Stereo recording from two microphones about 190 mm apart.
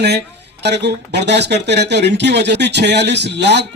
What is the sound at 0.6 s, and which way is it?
Speech, 60° right (ahead or behind).